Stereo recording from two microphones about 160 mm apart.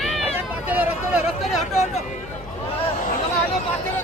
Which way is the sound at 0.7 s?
10° right (ahead or behind).